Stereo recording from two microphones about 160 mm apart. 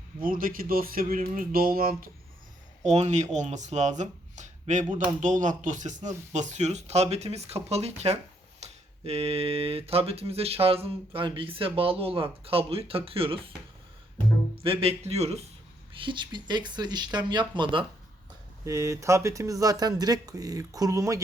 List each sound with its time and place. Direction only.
0.2 s speech: 60° right (ahead or behind)
2.8 s speech: 45° right (ahead or behind)
14.6 s speech: 35° right (ahead or behind)
18.6 s speech: 20° right (ahead or behind)